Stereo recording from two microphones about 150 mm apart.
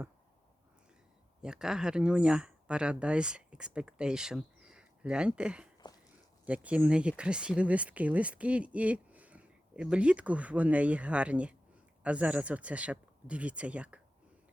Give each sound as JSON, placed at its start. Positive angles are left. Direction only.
{"t": 1.4, "sound": "speech", "side_deg": -5}
{"t": 5.8, "sound": "a sound", "side_deg": 30}
{"t": 6.4, "sound": "speech", "side_deg": -10}